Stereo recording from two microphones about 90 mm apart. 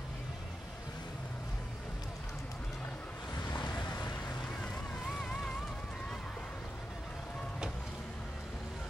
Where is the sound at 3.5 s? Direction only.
50° left (ahead or behind).